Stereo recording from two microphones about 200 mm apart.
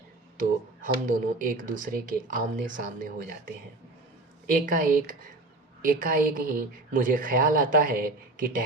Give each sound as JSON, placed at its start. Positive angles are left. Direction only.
{"t": 0.3, "sound": "speech", "side_deg": -45}
{"t": 4.5, "sound": "speech", "side_deg": -45}